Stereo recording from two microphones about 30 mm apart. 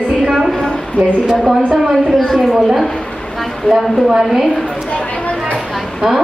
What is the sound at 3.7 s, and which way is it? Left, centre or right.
Speech, centre.